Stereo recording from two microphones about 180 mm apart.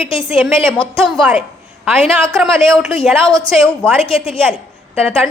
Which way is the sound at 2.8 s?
Centre (ahead or behind).